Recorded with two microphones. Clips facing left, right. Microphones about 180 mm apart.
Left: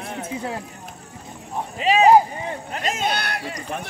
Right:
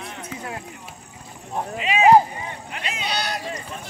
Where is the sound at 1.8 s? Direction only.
35° left (ahead or behind).